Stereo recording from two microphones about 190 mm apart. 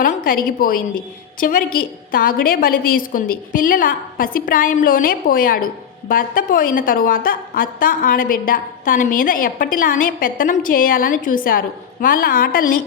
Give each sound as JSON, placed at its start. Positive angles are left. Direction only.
{"t": 0.0, "sound": "a woman's voice", "side_deg": 45}